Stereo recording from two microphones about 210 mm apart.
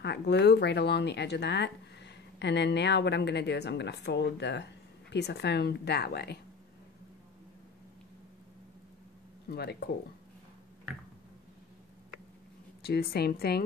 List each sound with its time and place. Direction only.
0.0 s a woman's voice: 55° left (ahead or behind)
9.5 s a woman's voice: 50° left (ahead or behind)
12.8 s a woman's voice: 50° left (ahead or behind)